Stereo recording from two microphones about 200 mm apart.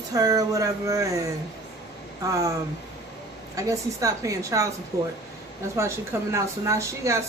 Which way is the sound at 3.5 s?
15° right (ahead or behind).